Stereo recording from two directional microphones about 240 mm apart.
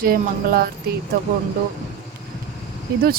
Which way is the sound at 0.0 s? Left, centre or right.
Right.